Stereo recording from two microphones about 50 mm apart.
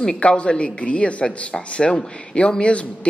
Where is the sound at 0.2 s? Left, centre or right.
Left.